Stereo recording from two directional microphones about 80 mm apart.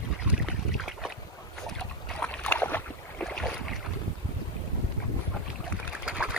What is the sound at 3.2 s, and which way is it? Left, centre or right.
Boat, centre.